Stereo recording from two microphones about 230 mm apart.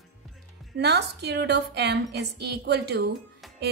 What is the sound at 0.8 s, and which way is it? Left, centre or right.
A woman's voice, right.